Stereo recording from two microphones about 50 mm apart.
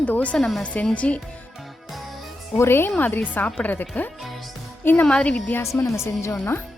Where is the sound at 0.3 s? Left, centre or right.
Centre.